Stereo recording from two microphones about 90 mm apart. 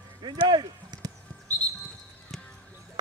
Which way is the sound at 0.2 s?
55° right (ahead or behind).